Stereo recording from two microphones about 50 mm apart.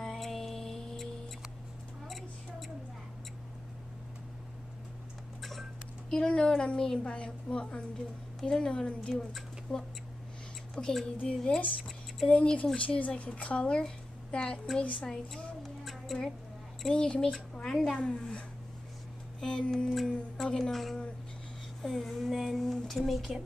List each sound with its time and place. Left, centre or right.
0.0 s music: centre
5.4 s a woman's voice: centre
10.7 s speech: centre
11.2 s a woman's voice: left
15.0 s music: centre
16.9 s a woman's voice: centre
19.4 s speech: centre
19.9 s speech: centre
20.4 s speech: centre
20.7 s speech: centre